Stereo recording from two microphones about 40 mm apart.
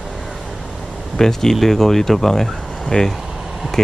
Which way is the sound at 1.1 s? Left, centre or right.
Centre.